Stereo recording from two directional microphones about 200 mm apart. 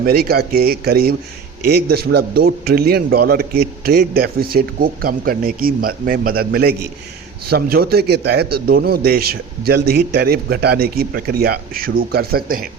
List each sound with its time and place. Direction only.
0.0 s a man's voice: 50° right (ahead or behind)